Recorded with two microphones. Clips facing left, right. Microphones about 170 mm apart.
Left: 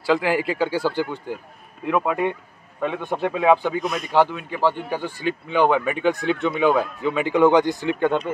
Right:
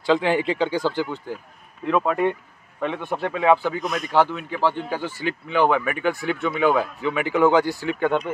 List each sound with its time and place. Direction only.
0.2 s speech: 25° right (ahead or behind)
0.5 s speech: 10° left (ahead or behind)